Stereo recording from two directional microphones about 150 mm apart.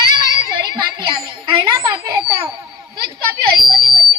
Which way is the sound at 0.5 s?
30° right (ahead or behind).